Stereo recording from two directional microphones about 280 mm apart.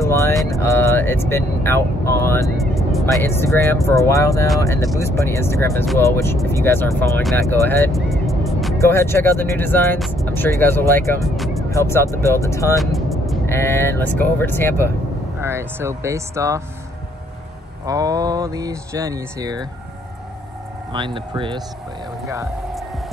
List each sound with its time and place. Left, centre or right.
0.0 s vehicle: centre
0.5 s speech: centre
12.7 s speech: centre
15.4 s speech: centre
17.8 s speech: centre
20.9 s speech: centre